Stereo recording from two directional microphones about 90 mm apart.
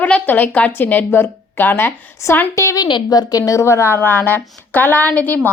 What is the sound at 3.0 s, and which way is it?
A woman's voice, 40° left (ahead or behind).